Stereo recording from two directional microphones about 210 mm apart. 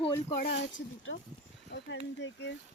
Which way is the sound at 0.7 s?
65° left (ahead or behind).